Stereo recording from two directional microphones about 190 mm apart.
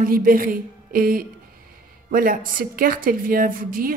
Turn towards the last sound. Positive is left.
turn(degrees=-45)  # may be behind; listen again after turning